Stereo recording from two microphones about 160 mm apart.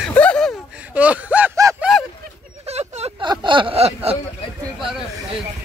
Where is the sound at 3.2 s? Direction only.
30° right (ahead or behind).